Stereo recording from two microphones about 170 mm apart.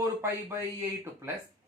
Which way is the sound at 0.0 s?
15° right (ahead or behind).